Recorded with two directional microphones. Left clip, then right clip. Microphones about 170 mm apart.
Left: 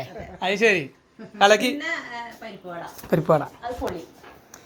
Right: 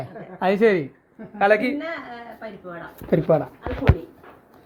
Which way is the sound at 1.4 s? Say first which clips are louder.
Left 1 dB; 30° left (ahead or behind).